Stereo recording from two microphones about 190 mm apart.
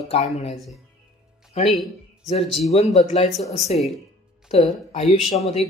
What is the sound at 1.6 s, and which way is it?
Speech, 35° left (ahead or behind).